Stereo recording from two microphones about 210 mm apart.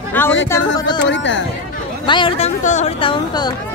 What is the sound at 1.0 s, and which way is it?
Speech, 60° left (ahead or behind).